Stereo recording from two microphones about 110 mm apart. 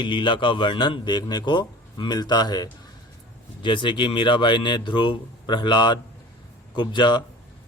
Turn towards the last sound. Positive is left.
turn(degrees=45)  # may be behind; listen again after turning